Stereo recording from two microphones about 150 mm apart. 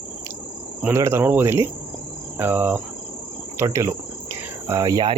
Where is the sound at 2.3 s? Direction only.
15° right (ahead or behind).